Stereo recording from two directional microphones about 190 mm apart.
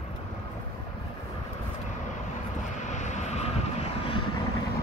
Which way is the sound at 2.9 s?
40° left (ahead or behind).